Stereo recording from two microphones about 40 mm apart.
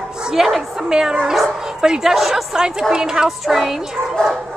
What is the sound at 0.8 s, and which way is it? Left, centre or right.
Speech, centre.